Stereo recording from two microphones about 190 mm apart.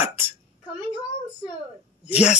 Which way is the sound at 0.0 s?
10° right (ahead or behind).